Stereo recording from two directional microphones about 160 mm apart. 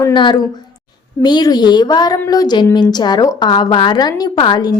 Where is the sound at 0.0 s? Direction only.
30° left (ahead or behind).